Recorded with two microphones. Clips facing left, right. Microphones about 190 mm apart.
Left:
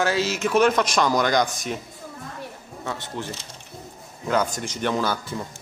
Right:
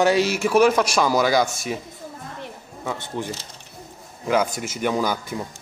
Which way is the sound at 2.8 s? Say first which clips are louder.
Right 3 dB; 15° right (ahead or behind).